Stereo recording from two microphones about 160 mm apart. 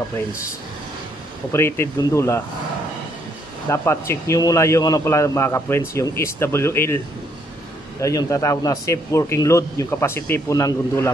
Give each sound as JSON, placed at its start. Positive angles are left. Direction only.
{"t": 1.5, "sound": "a man's voice", "side_deg": 15}
{"t": 3.7, "sound": "a man's voice", "side_deg": 15}
{"t": 8.0, "sound": "a man's voice", "side_deg": 20}